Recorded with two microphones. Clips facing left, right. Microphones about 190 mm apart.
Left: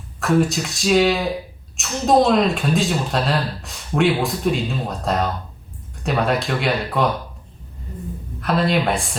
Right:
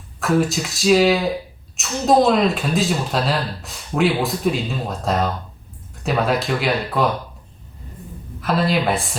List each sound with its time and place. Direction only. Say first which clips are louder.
0.2 s speech: left 1 dB; centre (ahead or behind)
8.4 s speech: even; centre (ahead or behind)